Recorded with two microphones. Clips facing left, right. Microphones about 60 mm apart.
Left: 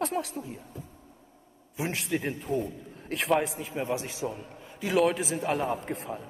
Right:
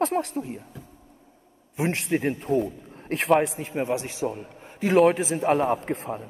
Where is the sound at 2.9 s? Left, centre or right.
Right.